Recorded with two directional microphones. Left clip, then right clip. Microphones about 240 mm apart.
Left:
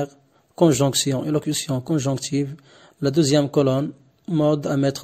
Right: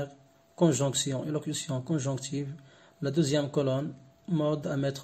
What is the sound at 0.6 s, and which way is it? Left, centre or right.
Speech, left.